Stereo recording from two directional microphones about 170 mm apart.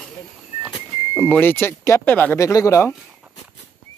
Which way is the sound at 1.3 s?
10° left (ahead or behind).